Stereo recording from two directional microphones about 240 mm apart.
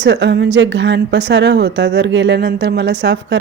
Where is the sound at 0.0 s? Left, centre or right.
Right.